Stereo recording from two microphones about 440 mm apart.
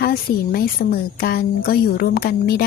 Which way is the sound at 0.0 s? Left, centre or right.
Left.